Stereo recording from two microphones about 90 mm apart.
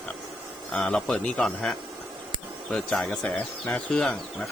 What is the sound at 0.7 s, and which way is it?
Speech, 10° left (ahead or behind).